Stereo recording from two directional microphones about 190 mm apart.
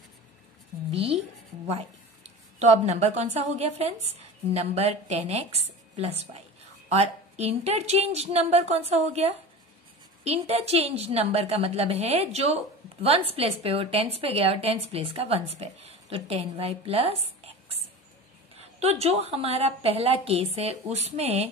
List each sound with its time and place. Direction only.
0.9 s speech: 30° right (ahead or behind)
2.6 s a woman's voice: 35° right (ahead or behind)